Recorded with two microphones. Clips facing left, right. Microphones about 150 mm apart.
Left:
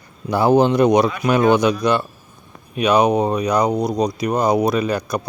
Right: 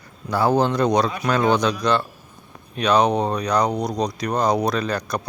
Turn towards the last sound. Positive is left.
turn(degrees=5)  # may be behind; listen again after turning